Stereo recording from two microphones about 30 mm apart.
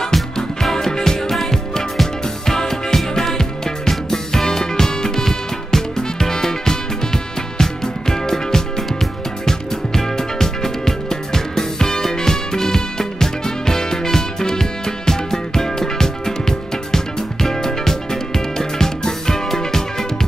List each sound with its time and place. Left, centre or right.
0.0 s music: centre
1.3 s music: centre
2.4 s music: centre